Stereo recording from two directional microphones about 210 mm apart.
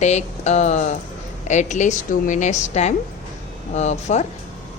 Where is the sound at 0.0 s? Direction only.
35° left (ahead or behind).